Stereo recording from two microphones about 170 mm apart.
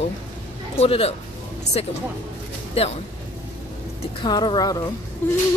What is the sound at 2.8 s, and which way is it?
Speech, 35° left (ahead or behind).